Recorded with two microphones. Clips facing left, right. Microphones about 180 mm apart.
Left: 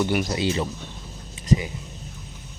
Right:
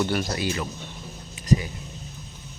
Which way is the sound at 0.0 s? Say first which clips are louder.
Left 2 dB; 15° left (ahead or behind).